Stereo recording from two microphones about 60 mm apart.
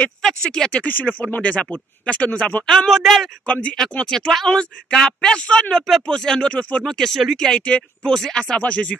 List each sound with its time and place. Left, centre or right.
0.2 s speech: centre
0.8 s speech: left
2.6 s speech: centre
2.9 s speech: centre
3.6 s speech: centre
6.9 s speech: centre
7.4 s speech: centre